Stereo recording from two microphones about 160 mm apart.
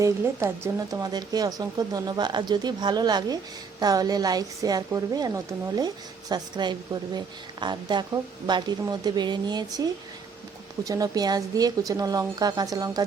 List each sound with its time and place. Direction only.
0.0 s a woman's voice: 15° right (ahead or behind)
10.8 s a woman's voice: 20° right (ahead or behind)